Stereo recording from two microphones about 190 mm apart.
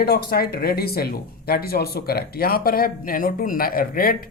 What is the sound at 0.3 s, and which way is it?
Speech, 55° left (ahead or behind).